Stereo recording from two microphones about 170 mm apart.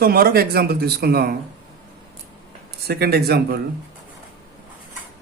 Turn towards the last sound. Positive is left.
turn(degrees=-70)  # may be behind; listen again after turning